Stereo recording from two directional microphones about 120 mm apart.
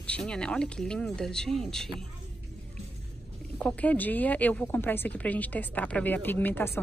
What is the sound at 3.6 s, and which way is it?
A woman's voice, 10° left (ahead or behind).